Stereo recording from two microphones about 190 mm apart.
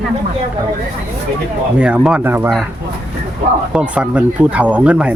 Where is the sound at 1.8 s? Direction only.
5° right (ahead or behind).